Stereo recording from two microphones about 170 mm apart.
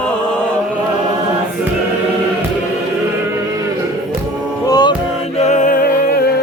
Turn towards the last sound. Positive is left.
turn(degrees=45)  # may be behind; listen again after turning